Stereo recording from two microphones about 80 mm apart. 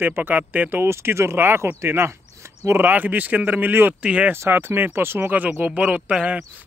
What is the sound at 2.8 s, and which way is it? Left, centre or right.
Speech, right.